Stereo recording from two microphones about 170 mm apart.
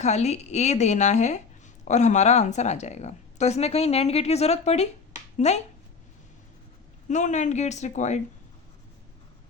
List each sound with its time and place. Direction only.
0.0 s a woman's voice: 40° left (ahead or behind)
7.1 s speech: 45° left (ahead or behind)